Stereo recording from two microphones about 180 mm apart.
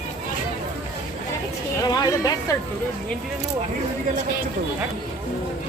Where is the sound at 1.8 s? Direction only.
20° left (ahead or behind).